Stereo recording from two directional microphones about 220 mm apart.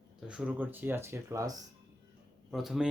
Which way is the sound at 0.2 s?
5° right (ahead or behind).